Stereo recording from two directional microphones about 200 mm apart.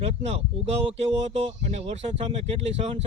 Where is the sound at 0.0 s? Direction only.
30° right (ahead or behind).